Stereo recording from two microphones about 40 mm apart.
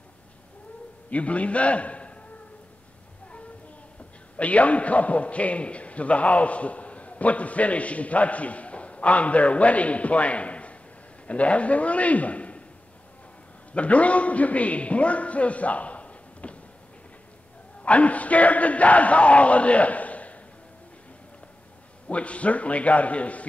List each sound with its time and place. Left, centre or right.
1.1 s a man's voice: left
4.4 s a man's voice: left
13.7 s a man's voice: left
17.8 s a sound: left
22.1 s a man's voice: left